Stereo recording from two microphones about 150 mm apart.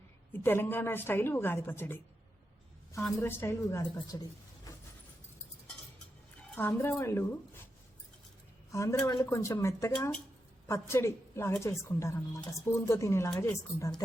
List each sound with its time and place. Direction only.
0.4 s speech: 15° left (ahead or behind)
3.2 s a woman's voice: 15° left (ahead or behind)
6.6 s speech: 15° left (ahead or behind)
8.7 s a woman's voice: 20° left (ahead or behind)
9.9 s a woman's voice: 10° left (ahead or behind)